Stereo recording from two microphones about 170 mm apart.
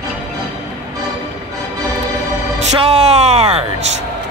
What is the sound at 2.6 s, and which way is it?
Music, 40° right (ahead or behind).